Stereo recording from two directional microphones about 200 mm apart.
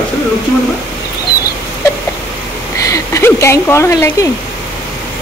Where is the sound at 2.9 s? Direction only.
15° left (ahead or behind).